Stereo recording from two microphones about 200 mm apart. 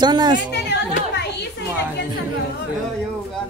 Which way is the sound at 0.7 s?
60° left (ahead or behind).